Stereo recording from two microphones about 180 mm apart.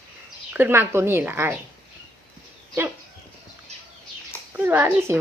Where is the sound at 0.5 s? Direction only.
10° right (ahead or behind).